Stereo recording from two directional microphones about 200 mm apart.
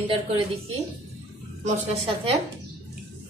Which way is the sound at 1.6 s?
30° right (ahead or behind).